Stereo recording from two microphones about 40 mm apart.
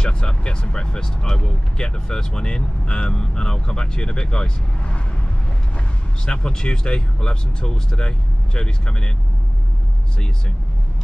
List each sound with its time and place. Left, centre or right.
0.0 s speech: left
6.2 s speech: centre